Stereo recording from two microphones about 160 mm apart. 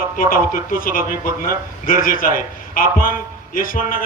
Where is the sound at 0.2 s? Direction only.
60° left (ahead or behind).